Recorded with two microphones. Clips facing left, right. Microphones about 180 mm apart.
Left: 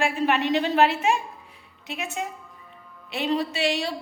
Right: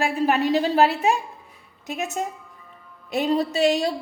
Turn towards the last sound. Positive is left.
turn(degrees=-40)  # may be behind; listen again after turning